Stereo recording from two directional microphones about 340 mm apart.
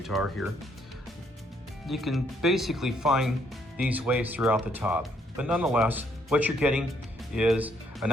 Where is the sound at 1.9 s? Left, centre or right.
Centre.